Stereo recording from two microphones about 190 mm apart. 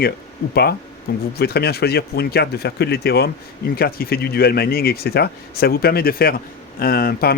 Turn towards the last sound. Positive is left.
turn(degrees=55)  # may be behind; listen again after turning